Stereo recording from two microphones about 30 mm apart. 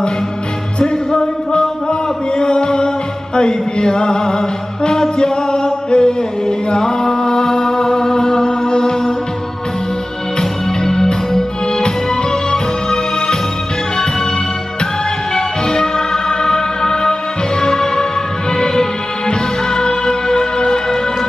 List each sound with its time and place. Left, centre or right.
0.7 s music: left
3.3 s a sound: left
4.8 s music: left
10.8 s music: centre
15.3 s music: left